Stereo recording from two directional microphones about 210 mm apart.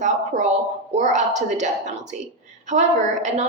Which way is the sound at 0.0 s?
35° right (ahead or behind).